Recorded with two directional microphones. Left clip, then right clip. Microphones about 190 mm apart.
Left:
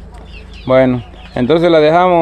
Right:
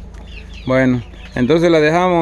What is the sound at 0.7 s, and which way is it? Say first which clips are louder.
Speech: left 5 dB; 5° right (ahead or behind).